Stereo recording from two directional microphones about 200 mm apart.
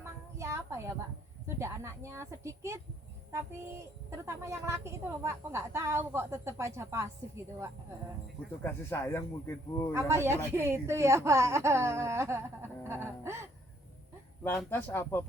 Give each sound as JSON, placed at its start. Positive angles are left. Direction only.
{"t": 0.0, "sound": "a sound", "side_deg": -15}
{"t": 1.5, "sound": "speech", "side_deg": -15}
{"t": 4.3, "sound": "speech", "side_deg": -15}
{"t": 8.6, "sound": "speech", "side_deg": 10}
{"t": 9.9, "sound": "speech", "side_deg": -15}
{"t": 14.4, "sound": "speech", "side_deg": 10}